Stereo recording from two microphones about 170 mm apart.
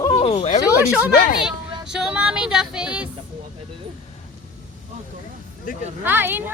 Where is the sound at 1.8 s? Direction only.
5° right (ahead or behind).